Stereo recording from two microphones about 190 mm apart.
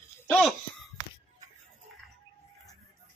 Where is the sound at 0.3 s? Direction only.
Centre (ahead or behind).